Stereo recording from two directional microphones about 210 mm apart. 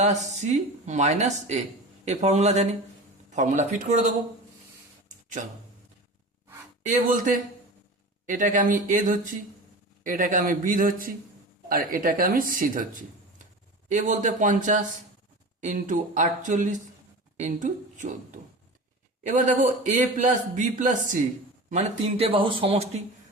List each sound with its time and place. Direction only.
0.0 s a man's voice: 35° right (ahead or behind)
5.0 s a sound: 35° right (ahead or behind)
6.8 s a man's voice: 40° right (ahead or behind)